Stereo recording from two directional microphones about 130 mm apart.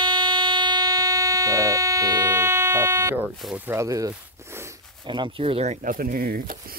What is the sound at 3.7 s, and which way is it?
Speech, 25° right (ahead or behind).